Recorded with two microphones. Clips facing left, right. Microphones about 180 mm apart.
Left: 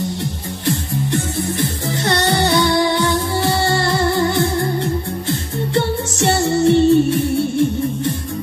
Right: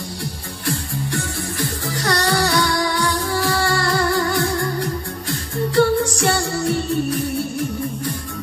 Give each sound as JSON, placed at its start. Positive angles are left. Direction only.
{"t": 0.2, "sound": "music", "side_deg": 20}